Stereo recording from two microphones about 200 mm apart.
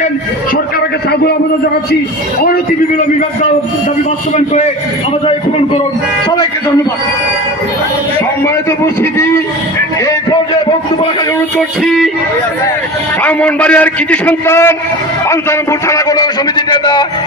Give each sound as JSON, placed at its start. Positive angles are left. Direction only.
{"t": 13.2, "sound": "a man's voice", "side_deg": 5}
{"t": 15.9, "sound": "a man's voice", "side_deg": 20}